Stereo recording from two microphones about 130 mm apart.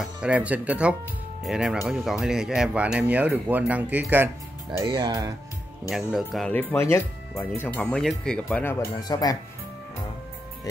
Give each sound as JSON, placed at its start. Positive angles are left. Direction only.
{"t": 0.0, "sound": "speech", "side_deg": -10}
{"t": 4.8, "sound": "speech", "side_deg": -35}
{"t": 5.9, "sound": "speech", "side_deg": 0}
{"t": 6.5, "sound": "speech", "side_deg": 15}
{"t": 9.0, "sound": "speech", "side_deg": 30}